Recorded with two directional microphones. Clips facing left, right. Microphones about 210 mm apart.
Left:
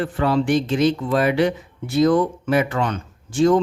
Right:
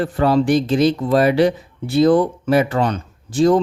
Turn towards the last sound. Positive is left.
turn(degrees=-35)  # may be behind; listen again after turning